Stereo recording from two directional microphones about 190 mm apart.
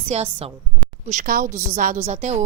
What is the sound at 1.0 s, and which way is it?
A woman's voice, 45° right (ahead or behind).